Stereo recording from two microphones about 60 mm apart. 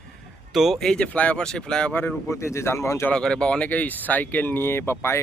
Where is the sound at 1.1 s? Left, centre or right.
Left.